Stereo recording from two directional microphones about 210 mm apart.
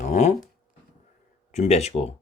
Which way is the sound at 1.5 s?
30° left (ahead or behind).